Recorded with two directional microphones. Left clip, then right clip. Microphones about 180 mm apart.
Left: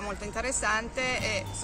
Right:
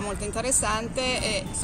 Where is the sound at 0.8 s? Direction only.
20° left (ahead or behind).